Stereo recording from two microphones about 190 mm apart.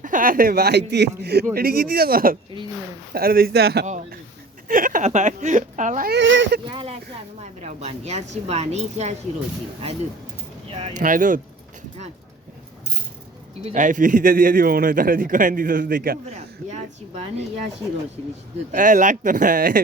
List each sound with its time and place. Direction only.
0.0 s a man's voice: 45° right (ahead or behind)
4.7 s a woman's voice: 45° right (ahead or behind)
6.1 s speech: 75° right (ahead or behind)
6.7 s a woman's voice: 25° right (ahead or behind)
10.7 s speech: 30° right (ahead or behind)
10.9 s a man's voice: 45° right (ahead or behind)
13.7 s a man's voice: 40° right (ahead or behind)
18.7 s a man's voice: 45° right (ahead or behind)